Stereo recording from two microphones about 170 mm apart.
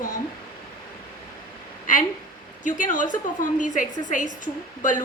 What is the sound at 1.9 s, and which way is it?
A woman's voice, 50° left (ahead or behind).